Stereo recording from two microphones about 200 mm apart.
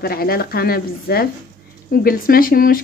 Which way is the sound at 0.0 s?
50° left (ahead or behind).